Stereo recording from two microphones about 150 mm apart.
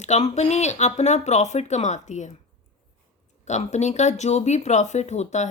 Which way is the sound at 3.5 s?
50° left (ahead or behind).